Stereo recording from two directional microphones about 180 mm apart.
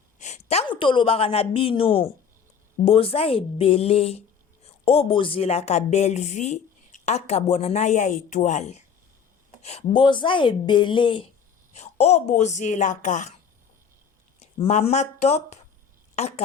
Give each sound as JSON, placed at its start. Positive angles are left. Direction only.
{"t": 0.2, "sound": "a woman's voice", "side_deg": 40}
{"t": 14.3, "sound": "a woman's voice", "side_deg": 35}